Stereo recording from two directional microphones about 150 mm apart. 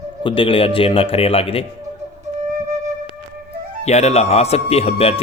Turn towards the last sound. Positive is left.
turn(degrees=45)  # may be behind; listen again after turning